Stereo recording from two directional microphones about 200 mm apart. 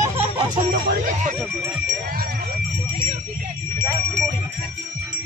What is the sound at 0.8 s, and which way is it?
Speech, 45° right (ahead or behind).